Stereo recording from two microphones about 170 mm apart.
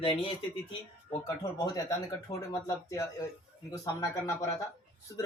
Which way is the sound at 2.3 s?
25° left (ahead or behind).